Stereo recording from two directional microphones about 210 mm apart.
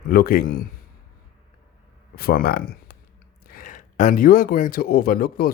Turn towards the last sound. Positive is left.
turn(degrees=45)  # may be behind; listen again after turning